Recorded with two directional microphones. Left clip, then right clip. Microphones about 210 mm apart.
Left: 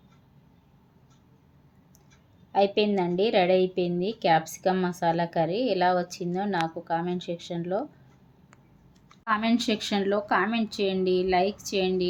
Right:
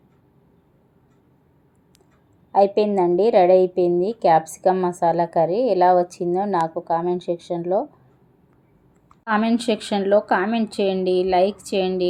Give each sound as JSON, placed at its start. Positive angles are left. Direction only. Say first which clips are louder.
{"t": 2.5, "sound": "a woman's voice", "louder": "right 6 dB", "side_deg": -10}
{"t": 9.2, "sound": "a woman's voice", "louder": "right 5 dB", "side_deg": -10}